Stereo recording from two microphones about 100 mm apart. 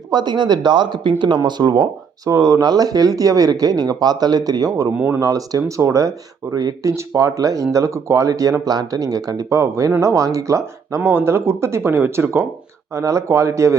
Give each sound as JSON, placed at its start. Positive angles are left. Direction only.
{"t": 0.1, "sound": "speech", "side_deg": -45}